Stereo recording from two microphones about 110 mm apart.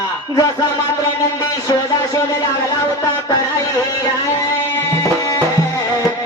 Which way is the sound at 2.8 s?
30° left (ahead or behind).